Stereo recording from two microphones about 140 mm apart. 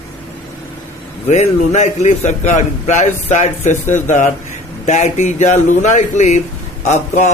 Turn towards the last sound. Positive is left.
turn(degrees=60)  # may be behind; listen again after turning